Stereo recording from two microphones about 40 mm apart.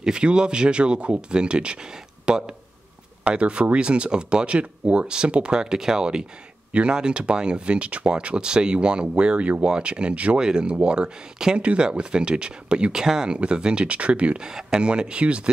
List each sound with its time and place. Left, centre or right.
0.0 s speech: right
6.7 s speech: right
10.7 s speech: right
11.0 s speech: centre
11.5 s speech: right
14.4 s speech: centre